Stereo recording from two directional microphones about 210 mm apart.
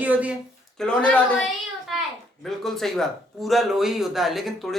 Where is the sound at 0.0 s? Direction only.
5° right (ahead or behind).